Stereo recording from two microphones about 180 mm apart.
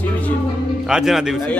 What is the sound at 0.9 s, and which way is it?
Speech, 5° right (ahead or behind).